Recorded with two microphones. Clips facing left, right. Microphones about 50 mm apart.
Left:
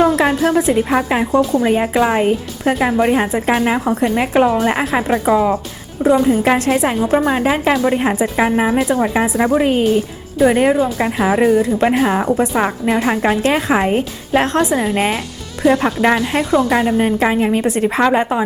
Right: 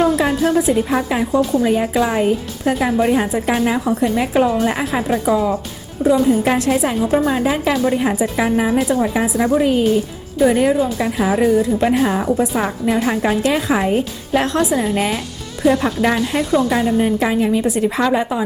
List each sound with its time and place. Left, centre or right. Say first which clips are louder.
0.3 s a woman's voice: left 1 dB; left
9.6 s speech: even; left
10.9 s a woman's voice: left 2 dB; left
11.4 s speech: left 1 dB; left
11.8 s a woman's voice: left 2 dB; left
13.4 s speech: left 2 dB; left
14.8 s a woman's voice: left 2 dB; left